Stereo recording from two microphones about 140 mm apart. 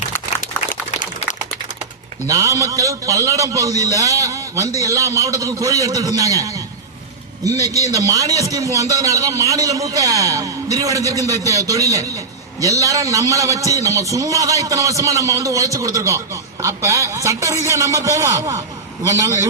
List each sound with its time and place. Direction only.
0.7 s a sound: 60° left (ahead or behind)
2.2 s a man's voice: 25° right (ahead or behind)
7.6 s a man's voice: 25° right (ahead or behind)